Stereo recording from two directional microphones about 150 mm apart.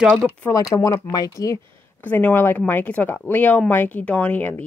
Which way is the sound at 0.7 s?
20° left (ahead or behind).